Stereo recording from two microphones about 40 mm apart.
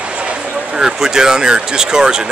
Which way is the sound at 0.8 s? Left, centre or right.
Centre.